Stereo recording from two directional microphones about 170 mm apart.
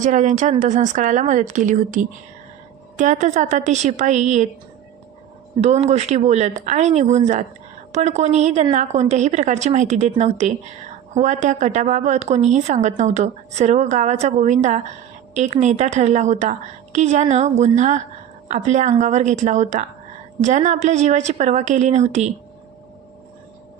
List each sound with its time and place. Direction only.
0.0 s a woman's voice: 45° right (ahead or behind)
5.5 s a woman's voice: 40° right (ahead or behind)